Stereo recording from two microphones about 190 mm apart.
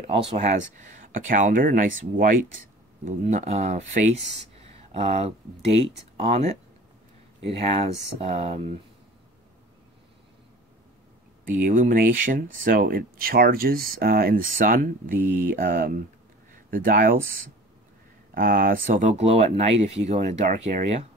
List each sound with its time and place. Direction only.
0.3 s speech: 40° right (ahead or behind)
11.6 s speech: 45° right (ahead or behind)
18.3 s speech: 50° right (ahead or behind)